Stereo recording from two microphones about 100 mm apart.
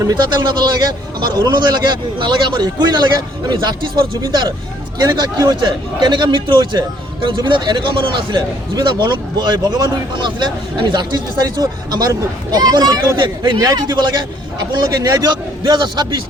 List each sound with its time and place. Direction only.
0.0 s a man's voice: 40° right (ahead or behind)
4.2 s a man's voice: 50° right (ahead or behind)
13.1 s a man's voice: 50° right (ahead or behind)